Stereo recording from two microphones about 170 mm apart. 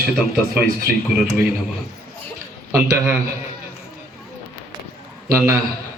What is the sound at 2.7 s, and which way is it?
Speech, 15° right (ahead or behind).